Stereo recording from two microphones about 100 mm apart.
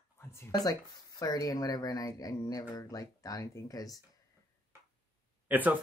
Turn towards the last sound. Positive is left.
turn(degrees=-15)  # may be behind; listen again after turning